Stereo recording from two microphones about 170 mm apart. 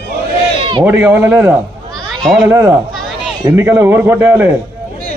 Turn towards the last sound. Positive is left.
turn(degrees=-10)  # may be behind; listen again after turning